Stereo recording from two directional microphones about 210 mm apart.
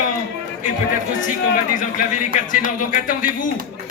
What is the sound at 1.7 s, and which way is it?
Speech, 40° left (ahead or behind).